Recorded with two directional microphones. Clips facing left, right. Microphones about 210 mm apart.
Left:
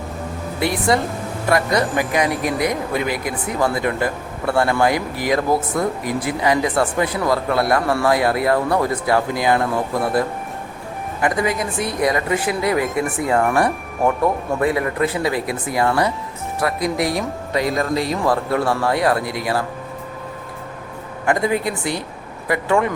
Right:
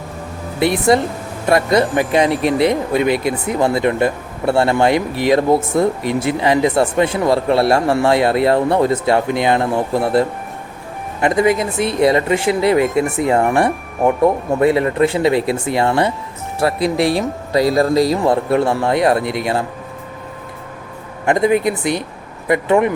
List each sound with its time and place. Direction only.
0.6 s speech: 20° right (ahead or behind)
18.3 s speech: 25° right (ahead or behind)
21.2 s speech: 20° right (ahead or behind)